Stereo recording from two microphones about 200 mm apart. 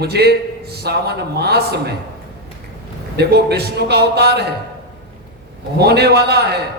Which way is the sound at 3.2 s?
55° right (ahead or behind).